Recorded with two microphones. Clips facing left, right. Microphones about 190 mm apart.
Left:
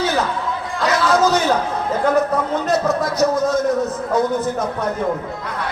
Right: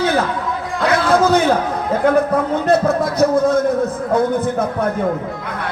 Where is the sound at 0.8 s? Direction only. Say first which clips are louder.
Right 2 dB; 55° right (ahead or behind).